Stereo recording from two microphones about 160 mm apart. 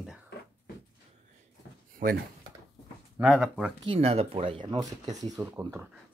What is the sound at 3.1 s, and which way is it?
Speech, 5° right (ahead or behind).